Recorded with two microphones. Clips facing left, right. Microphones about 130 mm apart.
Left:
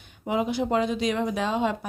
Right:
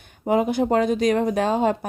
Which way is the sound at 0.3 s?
50° right (ahead or behind).